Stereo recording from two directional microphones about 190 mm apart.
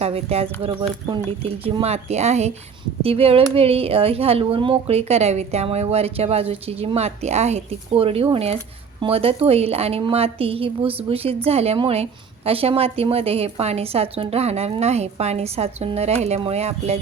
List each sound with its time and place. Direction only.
0.0 s speech: 30° right (ahead or behind)